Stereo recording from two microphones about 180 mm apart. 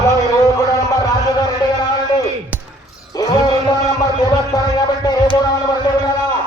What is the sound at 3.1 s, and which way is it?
Music, 20° left (ahead or behind).